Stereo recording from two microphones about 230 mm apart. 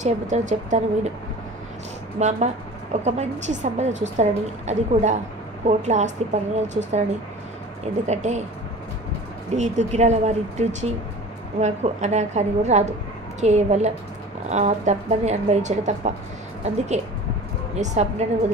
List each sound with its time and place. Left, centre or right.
0.0 s a woman's voice: right
2.1 s a woman's voice: right
8.1 s a woman's voice: right
9.6 s a woman's voice: right